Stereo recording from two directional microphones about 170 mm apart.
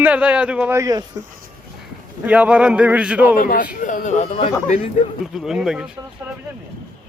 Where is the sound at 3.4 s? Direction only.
55° left (ahead or behind).